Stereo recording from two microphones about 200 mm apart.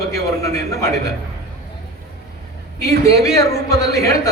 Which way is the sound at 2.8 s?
15° left (ahead or behind).